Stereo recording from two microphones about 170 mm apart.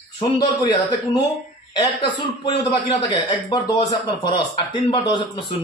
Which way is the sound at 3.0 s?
30° left (ahead or behind).